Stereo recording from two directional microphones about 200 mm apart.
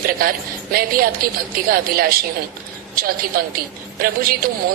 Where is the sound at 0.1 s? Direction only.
45° right (ahead or behind).